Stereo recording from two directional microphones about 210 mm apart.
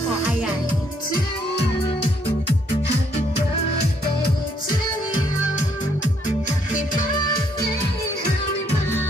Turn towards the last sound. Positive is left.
turn(degrees=20)  # may be behind; listen again after turning